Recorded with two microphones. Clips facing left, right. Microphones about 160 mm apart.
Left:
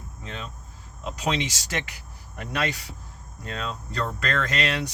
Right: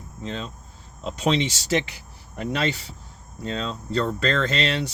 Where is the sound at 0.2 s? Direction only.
30° right (ahead or behind).